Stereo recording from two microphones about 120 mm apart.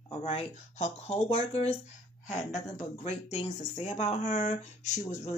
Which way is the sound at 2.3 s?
75° left (ahead or behind).